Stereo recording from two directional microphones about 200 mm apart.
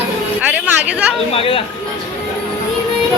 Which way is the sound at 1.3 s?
25° left (ahead or behind).